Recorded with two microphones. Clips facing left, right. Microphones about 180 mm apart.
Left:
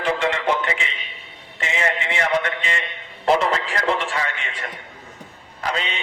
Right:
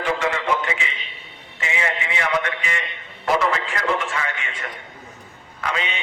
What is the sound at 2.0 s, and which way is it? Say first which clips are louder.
A man's voice: left 1 dB; 30° left (ahead or behind).